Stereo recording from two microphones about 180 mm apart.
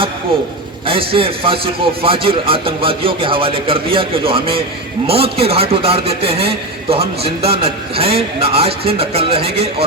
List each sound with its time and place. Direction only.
0.9 s a man's voice: 30° right (ahead or behind)